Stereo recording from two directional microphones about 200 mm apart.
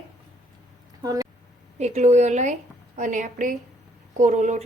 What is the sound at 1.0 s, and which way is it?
Speech, 15° right (ahead or behind).